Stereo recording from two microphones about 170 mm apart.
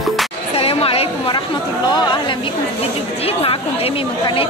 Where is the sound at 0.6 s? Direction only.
35° left (ahead or behind).